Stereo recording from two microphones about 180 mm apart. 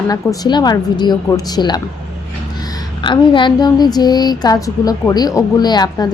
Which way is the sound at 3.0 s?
25° left (ahead or behind).